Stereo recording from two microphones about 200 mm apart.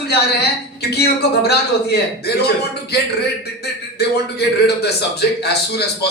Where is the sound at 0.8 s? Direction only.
55° left (ahead or behind).